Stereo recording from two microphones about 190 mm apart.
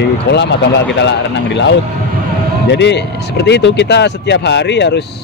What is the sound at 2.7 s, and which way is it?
A man's voice, 65° left (ahead or behind).